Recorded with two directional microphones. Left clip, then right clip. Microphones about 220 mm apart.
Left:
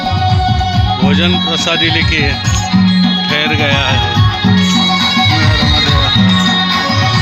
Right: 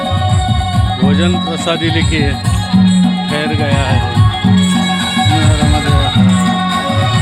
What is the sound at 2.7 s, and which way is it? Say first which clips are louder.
Music: right 1 dB; 70° right (ahead or behind).